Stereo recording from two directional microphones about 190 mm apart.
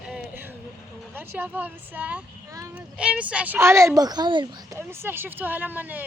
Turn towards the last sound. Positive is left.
turn(degrees=-10)  # may be behind; listen again after turning